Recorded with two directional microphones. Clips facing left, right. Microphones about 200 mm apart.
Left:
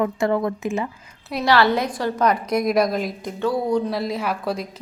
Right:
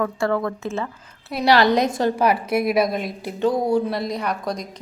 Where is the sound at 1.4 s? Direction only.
15° right (ahead or behind).